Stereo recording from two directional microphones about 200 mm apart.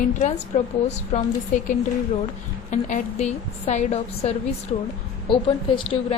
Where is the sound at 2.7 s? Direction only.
35° left (ahead or behind).